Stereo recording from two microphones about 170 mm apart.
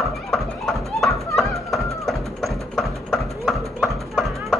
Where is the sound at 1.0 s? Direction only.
Centre (ahead or behind).